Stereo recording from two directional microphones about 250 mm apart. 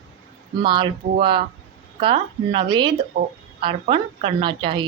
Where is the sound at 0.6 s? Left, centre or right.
Centre.